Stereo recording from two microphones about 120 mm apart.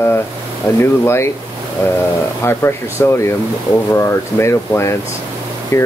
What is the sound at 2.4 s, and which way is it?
Speech, 20° left (ahead or behind).